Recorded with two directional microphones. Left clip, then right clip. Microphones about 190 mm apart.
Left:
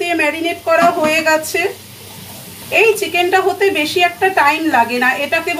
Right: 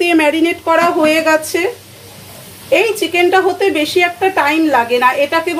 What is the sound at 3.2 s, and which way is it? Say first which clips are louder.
A woman's voice: right 6 dB; 30° right (ahead or behind).